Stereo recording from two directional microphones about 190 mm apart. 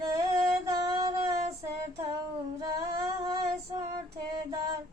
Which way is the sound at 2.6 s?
20° right (ahead or behind).